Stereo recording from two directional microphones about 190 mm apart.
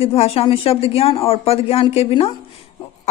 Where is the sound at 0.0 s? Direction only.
30° left (ahead or behind).